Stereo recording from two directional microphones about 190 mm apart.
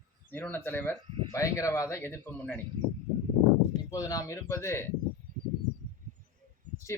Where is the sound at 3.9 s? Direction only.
20° left (ahead or behind).